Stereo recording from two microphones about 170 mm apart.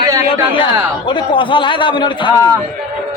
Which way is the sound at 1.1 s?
30° left (ahead or behind).